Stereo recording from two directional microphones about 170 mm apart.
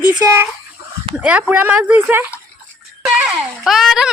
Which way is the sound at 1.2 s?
5° right (ahead or behind).